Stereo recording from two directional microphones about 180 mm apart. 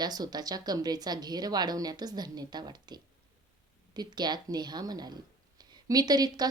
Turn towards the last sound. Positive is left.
turn(degrees=-20)  # may be behind; listen again after turning